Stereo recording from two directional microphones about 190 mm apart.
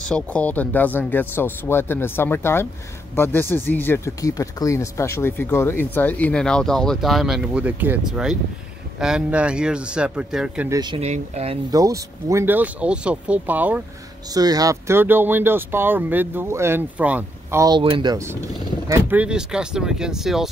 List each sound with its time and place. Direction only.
0.0 s speech: 5° left (ahead or behind)
10.7 s speech: 20° right (ahead or behind)
11.0 s speech: 35° right (ahead or behind)
11.7 s speech: 20° right (ahead or behind)
14.3 s speech: 20° right (ahead or behind); by 20.4 s centre (ahead or behind)